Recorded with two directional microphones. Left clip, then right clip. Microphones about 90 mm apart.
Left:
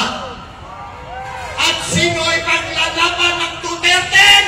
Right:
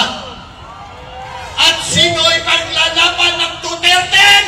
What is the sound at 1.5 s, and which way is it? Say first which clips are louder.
A man's voice: right 5 dB; 25° right (ahead or behind).